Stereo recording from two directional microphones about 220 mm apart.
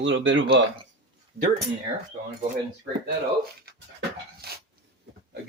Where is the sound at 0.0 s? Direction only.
55° right (ahead or behind).